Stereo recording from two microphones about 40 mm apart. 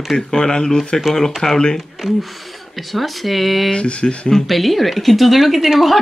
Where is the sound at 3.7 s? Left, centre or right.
Left.